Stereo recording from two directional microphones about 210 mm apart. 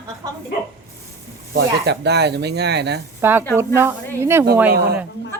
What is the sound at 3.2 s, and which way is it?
A woman's voice, 10° right (ahead or behind).